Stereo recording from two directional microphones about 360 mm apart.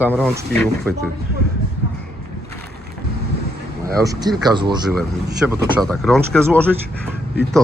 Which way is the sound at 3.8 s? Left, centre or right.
Centre.